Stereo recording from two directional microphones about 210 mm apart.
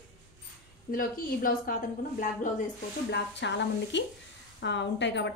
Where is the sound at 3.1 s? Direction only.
55° left (ahead or behind).